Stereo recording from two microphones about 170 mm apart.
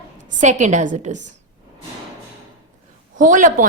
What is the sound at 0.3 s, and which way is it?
Speech, 45° right (ahead or behind).